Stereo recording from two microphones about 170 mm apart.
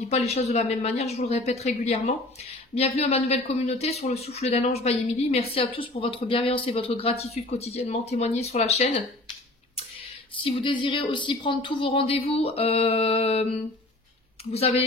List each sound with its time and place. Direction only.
0.1 s speech: 40° left (ahead or behind)
10.4 s speech: 30° left (ahead or behind)